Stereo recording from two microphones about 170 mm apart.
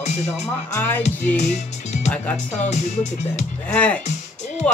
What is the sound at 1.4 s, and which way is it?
Music, 40° left (ahead or behind).